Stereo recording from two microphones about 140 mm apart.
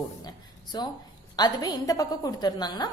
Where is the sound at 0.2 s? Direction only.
30° left (ahead or behind).